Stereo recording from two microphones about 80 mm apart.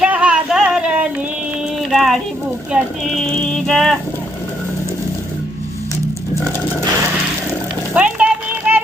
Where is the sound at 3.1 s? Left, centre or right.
Centre.